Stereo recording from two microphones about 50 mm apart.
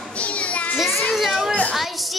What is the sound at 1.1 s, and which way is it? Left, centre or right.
Children playing, centre.